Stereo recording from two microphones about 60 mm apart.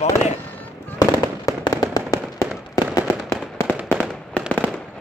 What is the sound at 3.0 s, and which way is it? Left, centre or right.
Fireworks, left.